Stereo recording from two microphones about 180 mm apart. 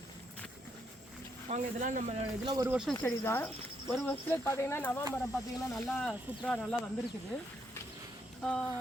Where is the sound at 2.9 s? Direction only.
10° left (ahead or behind).